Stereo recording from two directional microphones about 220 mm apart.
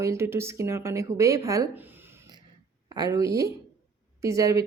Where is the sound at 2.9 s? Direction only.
15° right (ahead or behind).